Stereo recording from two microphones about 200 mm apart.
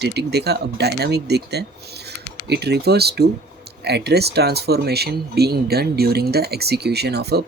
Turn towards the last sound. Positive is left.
turn(degrees=-55)  # may be behind; listen again after turning